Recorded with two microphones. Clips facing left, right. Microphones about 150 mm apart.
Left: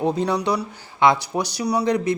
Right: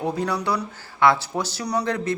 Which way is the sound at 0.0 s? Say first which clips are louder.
Left 4 dB; 20° left (ahead or behind).